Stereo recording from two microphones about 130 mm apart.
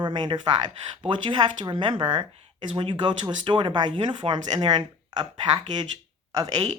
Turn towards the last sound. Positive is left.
turn(degrees=-35)  # may be behind; listen again after turning